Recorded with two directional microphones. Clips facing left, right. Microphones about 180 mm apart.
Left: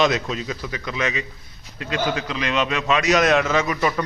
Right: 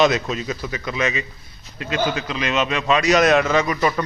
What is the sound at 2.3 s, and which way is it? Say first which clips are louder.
Speech: right 1 dB; 20° right (ahead or behind).